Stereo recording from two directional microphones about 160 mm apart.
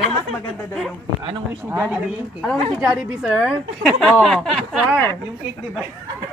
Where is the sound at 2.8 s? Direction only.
5° right (ahead or behind).